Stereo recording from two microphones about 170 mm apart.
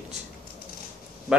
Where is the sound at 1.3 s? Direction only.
5° right (ahead or behind).